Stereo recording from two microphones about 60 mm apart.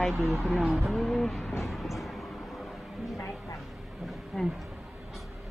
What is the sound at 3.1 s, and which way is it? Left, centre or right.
Speech, left.